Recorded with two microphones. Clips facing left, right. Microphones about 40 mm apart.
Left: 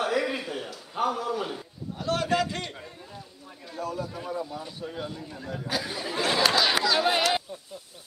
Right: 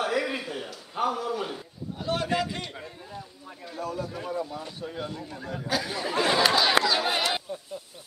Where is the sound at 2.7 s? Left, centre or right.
Centre.